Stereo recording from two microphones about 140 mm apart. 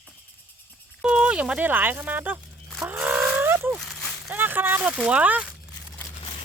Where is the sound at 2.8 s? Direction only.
15° right (ahead or behind).